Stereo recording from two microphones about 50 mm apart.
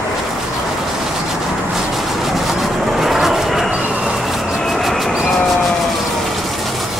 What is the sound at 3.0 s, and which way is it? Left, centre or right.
Vehicle, centre.